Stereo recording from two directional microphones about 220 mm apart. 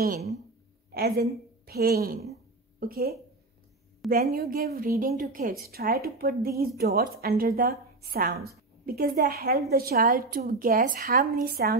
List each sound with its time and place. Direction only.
0.0 s a woman's voice: 45° right (ahead or behind)